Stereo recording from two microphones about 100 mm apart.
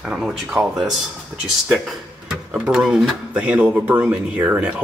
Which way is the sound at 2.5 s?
5° right (ahead or behind).